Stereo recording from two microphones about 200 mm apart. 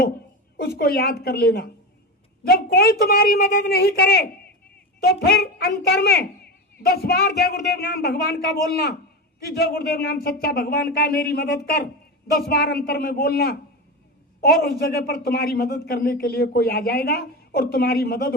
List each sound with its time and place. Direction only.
0.5 s speech: 50° left (ahead or behind)